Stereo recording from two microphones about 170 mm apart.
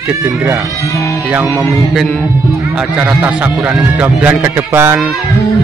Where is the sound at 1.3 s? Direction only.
10° right (ahead or behind).